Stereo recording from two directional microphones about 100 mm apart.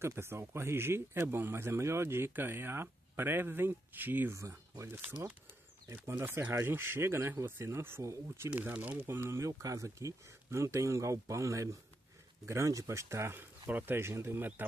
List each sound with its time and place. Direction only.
0.0 s speech: 25° right (ahead or behind)
4.4 s speech: 30° right (ahead or behind)
8.5 s speech: 15° right (ahead or behind)